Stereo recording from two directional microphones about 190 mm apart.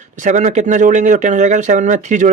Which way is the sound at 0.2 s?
40° right (ahead or behind).